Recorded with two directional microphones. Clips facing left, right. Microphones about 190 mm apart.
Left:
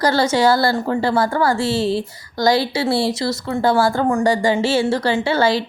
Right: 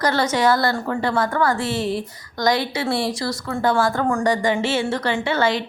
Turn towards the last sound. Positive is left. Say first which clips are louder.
# left 3 dB
turn(degrees=35)  # may be behind; listen again after turning